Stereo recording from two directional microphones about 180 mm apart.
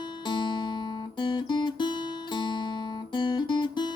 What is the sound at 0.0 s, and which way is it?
Music, 25° left (ahead or behind).